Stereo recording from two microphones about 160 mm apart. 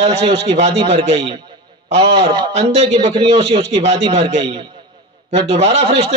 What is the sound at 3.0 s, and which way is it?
Speech, 25° right (ahead or behind).